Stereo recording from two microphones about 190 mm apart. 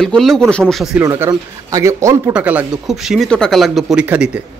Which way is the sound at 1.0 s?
15° right (ahead or behind).